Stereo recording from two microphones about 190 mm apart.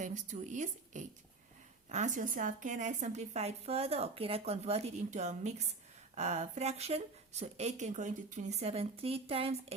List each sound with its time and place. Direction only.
0.0 s a woman's voice: 40° right (ahead or behind)